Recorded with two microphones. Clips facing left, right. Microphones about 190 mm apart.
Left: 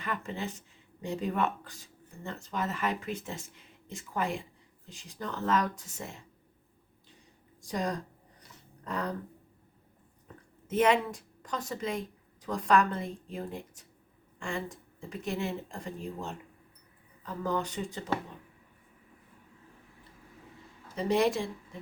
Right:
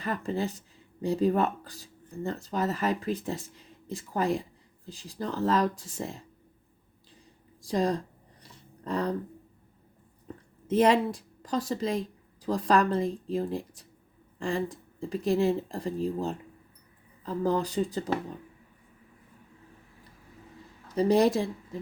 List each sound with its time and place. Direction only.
0.0 s speech: 35° right (ahead or behind)
7.6 s speech: 30° right (ahead or behind)
10.7 s speech: 35° right (ahead or behind)
20.9 s speech: 35° right (ahead or behind)